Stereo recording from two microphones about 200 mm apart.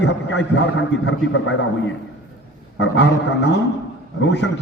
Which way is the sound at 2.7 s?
65° left (ahead or behind).